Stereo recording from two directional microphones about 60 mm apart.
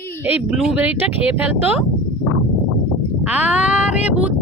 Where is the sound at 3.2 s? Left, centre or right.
Right.